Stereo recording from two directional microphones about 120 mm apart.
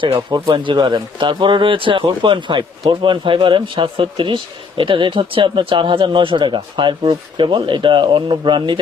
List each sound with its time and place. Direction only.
0.0 s speech: 45° right (ahead or behind)